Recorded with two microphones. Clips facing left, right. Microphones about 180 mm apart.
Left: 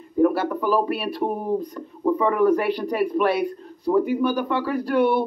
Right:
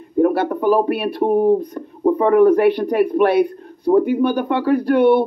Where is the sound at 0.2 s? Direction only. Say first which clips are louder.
Right 4 dB; 55° right (ahead or behind).